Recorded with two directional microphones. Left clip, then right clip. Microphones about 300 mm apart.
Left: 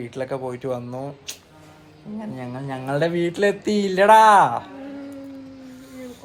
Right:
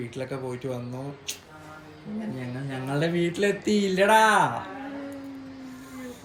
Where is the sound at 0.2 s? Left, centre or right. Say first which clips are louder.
Left 7 dB; centre.